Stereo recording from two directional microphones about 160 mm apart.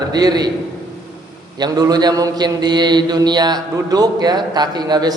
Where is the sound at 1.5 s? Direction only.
25° right (ahead or behind).